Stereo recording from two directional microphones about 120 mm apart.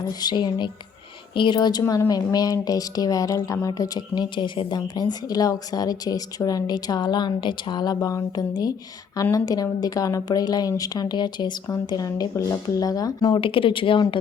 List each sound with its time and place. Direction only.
0.1 s speech: 35° left (ahead or behind)
1.8 s speech: 20° left (ahead or behind)
2.0 s speech: 35° left (ahead or behind)
13.3 s speech: 50° left (ahead or behind)